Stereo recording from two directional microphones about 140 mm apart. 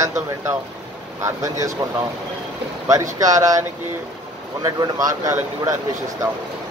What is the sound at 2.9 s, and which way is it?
Speech, 25° right (ahead or behind).